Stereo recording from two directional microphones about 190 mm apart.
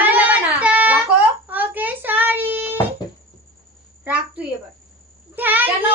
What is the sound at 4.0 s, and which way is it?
Cricket, 5° right (ahead or behind).